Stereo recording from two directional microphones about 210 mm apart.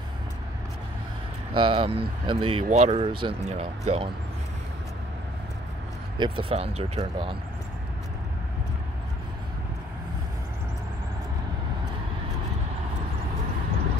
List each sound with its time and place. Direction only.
1.5 s speech: 25° right (ahead or behind)
6.1 s speech: 25° right (ahead or behind)